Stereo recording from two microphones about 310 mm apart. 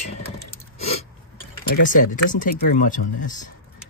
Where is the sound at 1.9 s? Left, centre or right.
Left.